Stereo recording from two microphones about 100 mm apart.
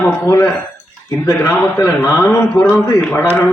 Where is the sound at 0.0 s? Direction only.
25° left (ahead or behind).